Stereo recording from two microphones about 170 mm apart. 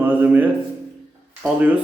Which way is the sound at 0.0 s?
10° right (ahead or behind).